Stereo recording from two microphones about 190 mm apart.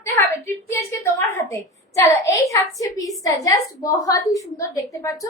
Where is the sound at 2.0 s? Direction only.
15° left (ahead or behind).